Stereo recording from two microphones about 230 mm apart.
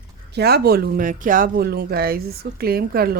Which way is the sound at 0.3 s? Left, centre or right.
Right.